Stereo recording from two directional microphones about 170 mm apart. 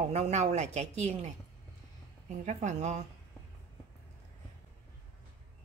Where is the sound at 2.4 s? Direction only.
45° right (ahead or behind).